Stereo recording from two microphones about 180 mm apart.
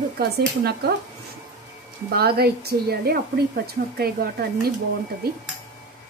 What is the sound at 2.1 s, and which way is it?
A woman's voice, 60° right (ahead or behind).